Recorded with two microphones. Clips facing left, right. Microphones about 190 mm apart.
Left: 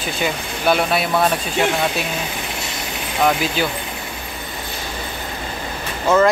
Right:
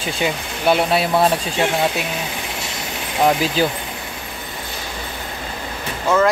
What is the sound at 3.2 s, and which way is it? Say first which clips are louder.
Speech: right 2 dB; 30° right (ahead or behind).